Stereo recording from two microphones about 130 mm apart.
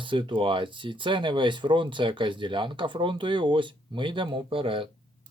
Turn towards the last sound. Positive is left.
turn(degrees=-40)  # may be behind; listen again after turning